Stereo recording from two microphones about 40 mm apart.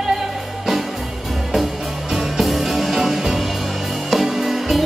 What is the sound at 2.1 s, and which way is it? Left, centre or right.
Music, centre.